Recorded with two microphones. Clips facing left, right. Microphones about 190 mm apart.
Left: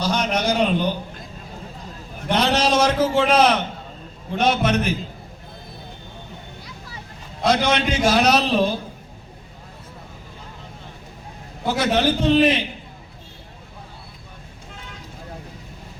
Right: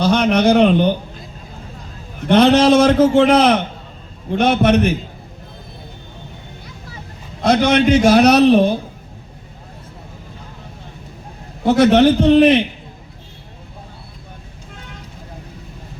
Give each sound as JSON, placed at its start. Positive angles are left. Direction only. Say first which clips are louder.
{"t": 0.0, "sound": "a sound", "louder": "right 8 dB", "side_deg": -60}
{"t": 2.3, "sound": "a man's voice", "louder": "right 9 dB", "side_deg": -55}
{"t": 7.4, "sound": "a man's voice", "louder": "right 6 dB", "side_deg": -60}
{"t": 11.6, "sound": "a man's voice", "louder": "right 9 dB", "side_deg": -60}